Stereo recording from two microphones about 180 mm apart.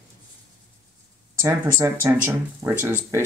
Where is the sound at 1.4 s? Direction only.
15° right (ahead or behind).